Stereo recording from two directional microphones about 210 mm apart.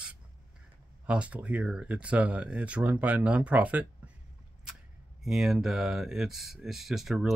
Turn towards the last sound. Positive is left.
turn(degrees=0)  # may be behind; listen again after turning